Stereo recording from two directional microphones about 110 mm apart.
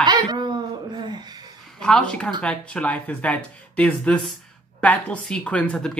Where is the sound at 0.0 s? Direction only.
40° right (ahead or behind).